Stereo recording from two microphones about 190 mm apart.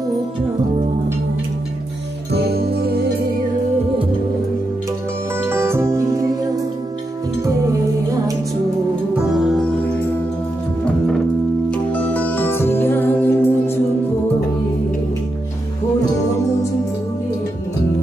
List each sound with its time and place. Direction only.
2.3 s music: 55° right (ahead or behind)
5.4 s music: 10° right (ahead or behind)
9.4 s music: centre (ahead or behind)
11.7 s music: 10° left (ahead or behind)